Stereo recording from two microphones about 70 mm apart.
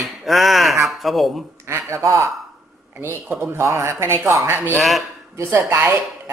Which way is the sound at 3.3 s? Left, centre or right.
Right.